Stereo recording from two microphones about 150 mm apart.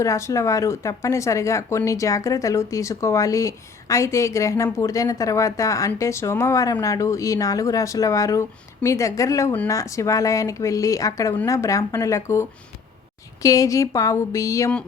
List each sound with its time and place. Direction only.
0.0 s speech: 20° left (ahead or behind)